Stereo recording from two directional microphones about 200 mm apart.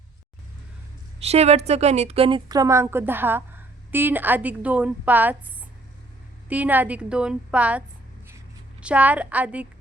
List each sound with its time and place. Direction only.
1.2 s a woman's voice: 30° right (ahead or behind); by 5.4 s 10° right (ahead or behind)
6.5 s a woman's voice: 10° right (ahead or behind)